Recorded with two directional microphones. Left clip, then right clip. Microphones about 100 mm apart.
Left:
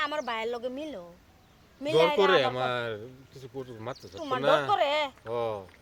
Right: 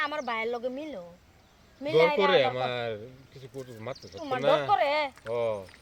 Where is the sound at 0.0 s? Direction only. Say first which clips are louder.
Even; 45° left (ahead or behind).